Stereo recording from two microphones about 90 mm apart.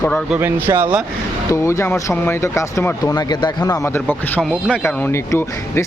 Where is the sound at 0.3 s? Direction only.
25° right (ahead or behind).